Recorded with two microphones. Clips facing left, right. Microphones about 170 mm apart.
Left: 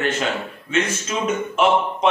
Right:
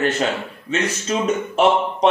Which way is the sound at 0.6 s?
40° right (ahead or behind).